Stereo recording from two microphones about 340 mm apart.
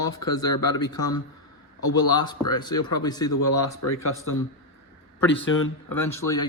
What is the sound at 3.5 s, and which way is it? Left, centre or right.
Speech, left.